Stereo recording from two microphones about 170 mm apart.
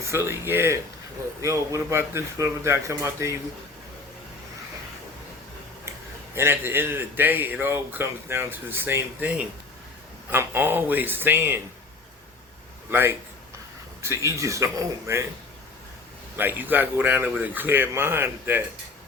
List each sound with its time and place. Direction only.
0.0 s a man's voice: 15° right (ahead or behind)
6.3 s a man's voice: 15° right (ahead or behind)
12.9 s a man's voice: 10° right (ahead or behind)
16.4 s a man's voice: 10° right (ahead or behind)